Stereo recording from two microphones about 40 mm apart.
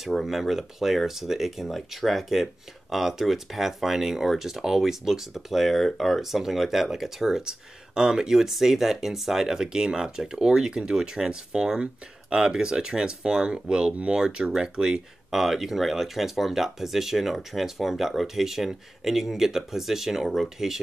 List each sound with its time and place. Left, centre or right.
0.3 s speech: centre
15.3 s speech: centre